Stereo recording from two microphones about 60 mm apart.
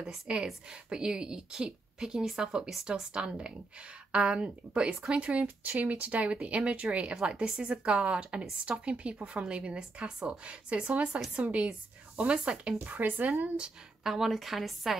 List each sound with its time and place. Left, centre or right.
0.0 s a woman's voice: centre
14.0 s a woman's voice: centre